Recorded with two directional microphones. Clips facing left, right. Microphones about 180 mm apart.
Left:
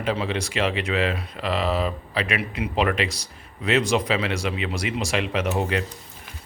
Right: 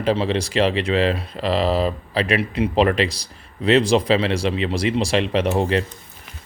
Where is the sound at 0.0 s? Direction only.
35° right (ahead or behind).